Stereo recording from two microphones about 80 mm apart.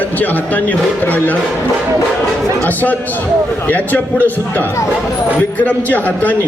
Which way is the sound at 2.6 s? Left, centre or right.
Left.